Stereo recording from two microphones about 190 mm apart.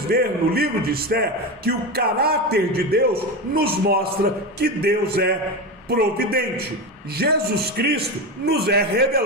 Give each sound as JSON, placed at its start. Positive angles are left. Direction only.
{"t": 0.1, "sound": "a man's voice", "side_deg": -55}